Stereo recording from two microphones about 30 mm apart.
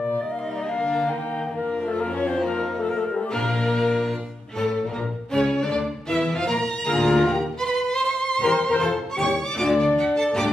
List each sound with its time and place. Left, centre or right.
3.6 s music: centre
5.5 s music: centre